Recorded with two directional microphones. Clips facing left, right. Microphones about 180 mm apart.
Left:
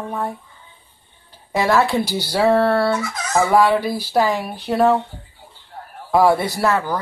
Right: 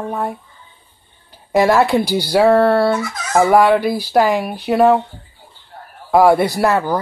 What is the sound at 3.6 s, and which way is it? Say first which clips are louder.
Speech: right 3 dB; 55° right (ahead or behind).